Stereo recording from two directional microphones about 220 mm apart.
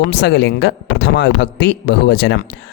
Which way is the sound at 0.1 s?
50° left (ahead or behind).